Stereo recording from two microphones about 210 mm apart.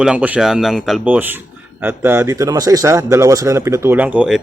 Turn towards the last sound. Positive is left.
turn(degrees=-5)  # may be behind; listen again after turning